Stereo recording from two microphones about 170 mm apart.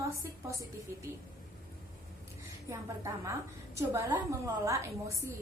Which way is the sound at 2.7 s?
15° right (ahead or behind).